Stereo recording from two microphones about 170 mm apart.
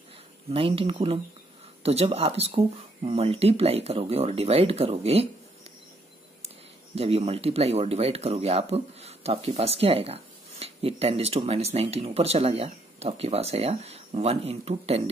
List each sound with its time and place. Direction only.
0.5 s speech: 30° right (ahead or behind)
7.0 s speech: 35° right (ahead or behind)